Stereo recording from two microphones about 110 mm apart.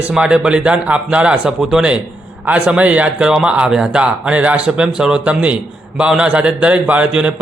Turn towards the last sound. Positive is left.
turn(degrees=-10)  # may be behind; listen again after turning